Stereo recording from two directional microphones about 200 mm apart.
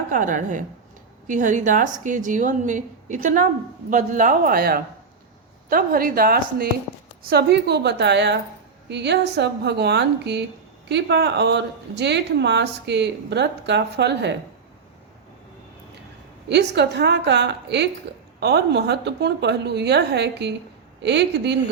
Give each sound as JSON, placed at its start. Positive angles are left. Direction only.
{"t": 0.1, "sound": "a woman's voice", "side_deg": -40}
{"t": 16.5, "sound": "speech", "side_deg": -60}